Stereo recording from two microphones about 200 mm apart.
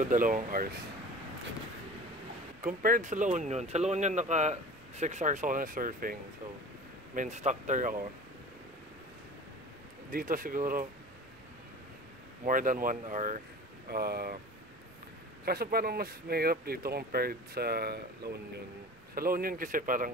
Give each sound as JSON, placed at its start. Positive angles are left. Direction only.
{"t": 0.1, "sound": "speech", "side_deg": -40}
{"t": 2.6, "sound": "speech", "side_deg": -45}
{"t": 7.2, "sound": "speech", "side_deg": -35}
{"t": 10.1, "sound": "speech", "side_deg": -45}
{"t": 12.4, "sound": "speech", "side_deg": -40}
{"t": 13.8, "sound": "speech", "side_deg": -50}
{"t": 15.4, "sound": "speech", "side_deg": -50}